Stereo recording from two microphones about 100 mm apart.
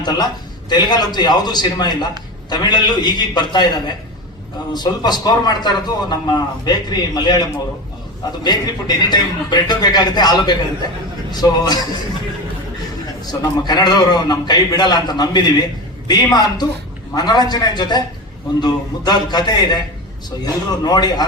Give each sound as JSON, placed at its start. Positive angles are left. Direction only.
{"t": 0.0, "sound": "a man's voice", "side_deg": 45}
{"t": 8.4, "sound": "a man's voice", "side_deg": 45}
{"t": 13.2, "sound": "a man's voice", "side_deg": 45}